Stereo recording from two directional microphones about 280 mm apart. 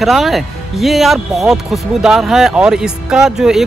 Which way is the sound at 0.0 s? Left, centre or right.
Centre.